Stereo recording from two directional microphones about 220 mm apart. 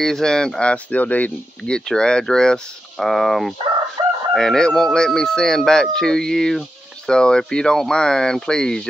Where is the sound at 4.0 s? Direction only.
20° right (ahead or behind).